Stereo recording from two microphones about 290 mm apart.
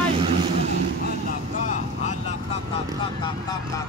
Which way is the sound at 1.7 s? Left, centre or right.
Left.